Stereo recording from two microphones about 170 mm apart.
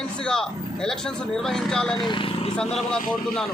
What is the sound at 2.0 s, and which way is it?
Speech, 30° left (ahead or behind).